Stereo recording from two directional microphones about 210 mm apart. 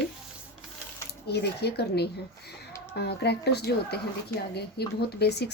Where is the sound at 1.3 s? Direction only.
50° left (ahead or behind).